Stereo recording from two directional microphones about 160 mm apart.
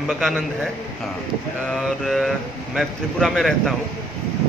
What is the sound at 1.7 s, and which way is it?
A man's voice, centre (ahead or behind).